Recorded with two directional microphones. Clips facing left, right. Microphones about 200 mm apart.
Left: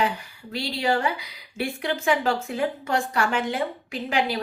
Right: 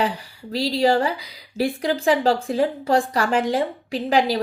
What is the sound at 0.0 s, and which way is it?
A woman's voice, 35° right (ahead or behind).